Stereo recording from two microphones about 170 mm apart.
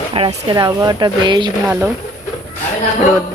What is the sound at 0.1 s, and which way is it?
Speech, 30° right (ahead or behind).